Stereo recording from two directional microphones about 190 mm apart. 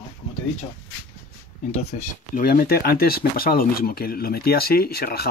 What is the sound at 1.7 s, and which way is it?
Speech, 40° left (ahead or behind).